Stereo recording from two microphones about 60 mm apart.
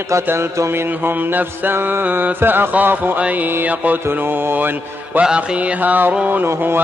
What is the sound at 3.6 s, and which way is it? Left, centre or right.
Mantra, right.